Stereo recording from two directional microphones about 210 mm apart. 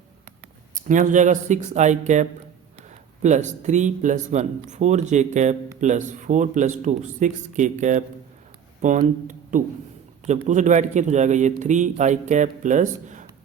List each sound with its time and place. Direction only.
0.7 s speech: 35° right (ahead or behind)
3.2 s speech: 35° right (ahead or behind)